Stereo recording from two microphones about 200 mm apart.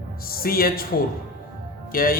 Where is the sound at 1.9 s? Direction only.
45° left (ahead or behind).